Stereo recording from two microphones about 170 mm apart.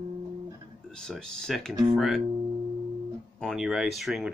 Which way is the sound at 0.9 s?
5° left (ahead or behind).